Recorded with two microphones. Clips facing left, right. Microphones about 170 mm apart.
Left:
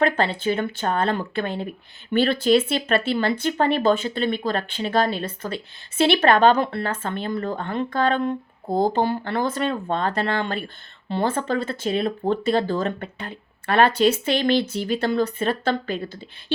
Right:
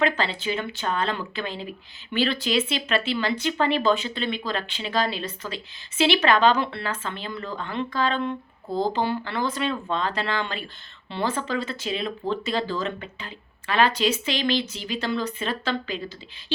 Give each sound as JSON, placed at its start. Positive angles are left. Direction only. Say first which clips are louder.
{"t": 0.0, "sound": "speech", "louder": "left 4 dB", "side_deg": 55}